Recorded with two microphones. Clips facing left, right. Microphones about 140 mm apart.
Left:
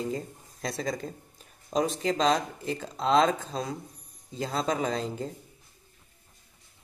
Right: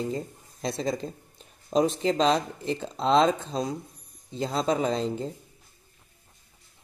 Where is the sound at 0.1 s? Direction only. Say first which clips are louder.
Right 2 dB; 30° right (ahead or behind).